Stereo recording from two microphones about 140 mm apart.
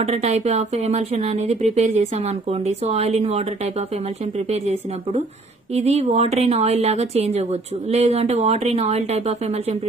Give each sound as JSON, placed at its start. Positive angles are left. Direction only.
{"t": 0.0, "sound": "speech", "side_deg": -50}
{"t": 4.5, "sound": "speech", "side_deg": -50}